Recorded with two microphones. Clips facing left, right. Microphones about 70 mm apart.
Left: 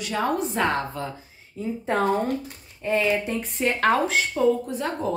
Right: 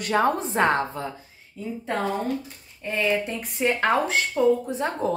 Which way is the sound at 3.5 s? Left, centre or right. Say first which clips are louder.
Even; centre.